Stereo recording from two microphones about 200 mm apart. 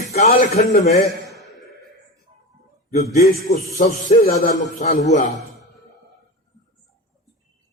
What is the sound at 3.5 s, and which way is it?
Speech, 35° left (ahead or behind).